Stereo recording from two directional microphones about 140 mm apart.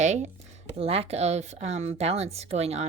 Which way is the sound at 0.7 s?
45° right (ahead or behind).